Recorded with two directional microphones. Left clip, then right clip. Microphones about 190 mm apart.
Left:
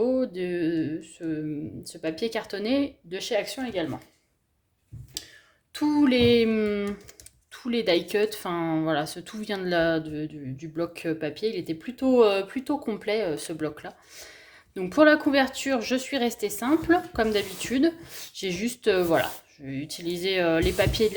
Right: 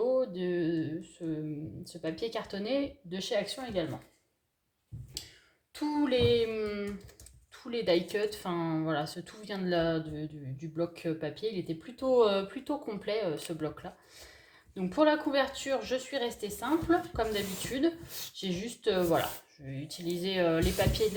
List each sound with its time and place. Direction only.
0.0 s a sound: 40° left (ahead or behind)
1.8 s speech: 40° left (ahead or behind)
5.7 s a woman's voice: 45° left (ahead or behind)